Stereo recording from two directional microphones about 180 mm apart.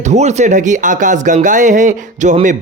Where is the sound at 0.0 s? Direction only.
40° right (ahead or behind).